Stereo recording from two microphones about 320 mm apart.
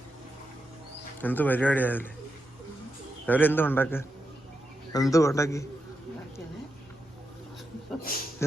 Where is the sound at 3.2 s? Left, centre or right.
Centre.